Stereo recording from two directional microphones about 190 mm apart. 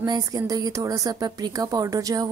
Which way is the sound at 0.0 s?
20° right (ahead or behind).